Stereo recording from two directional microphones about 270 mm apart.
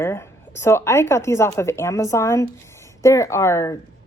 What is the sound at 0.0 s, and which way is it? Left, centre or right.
A woman's voice, centre.